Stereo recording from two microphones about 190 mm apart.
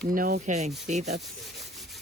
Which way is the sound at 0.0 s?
50° right (ahead or behind).